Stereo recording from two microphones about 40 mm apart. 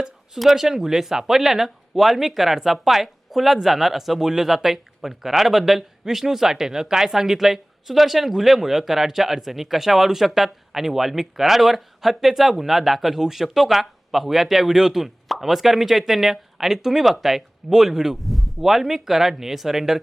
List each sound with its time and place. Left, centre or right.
0.3 s speech: centre